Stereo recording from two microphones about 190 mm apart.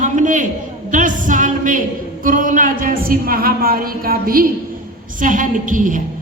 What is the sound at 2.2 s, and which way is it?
A woman's voice, 45° right (ahead or behind).